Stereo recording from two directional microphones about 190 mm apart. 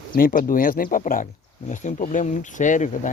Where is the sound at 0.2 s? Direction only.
50° left (ahead or behind).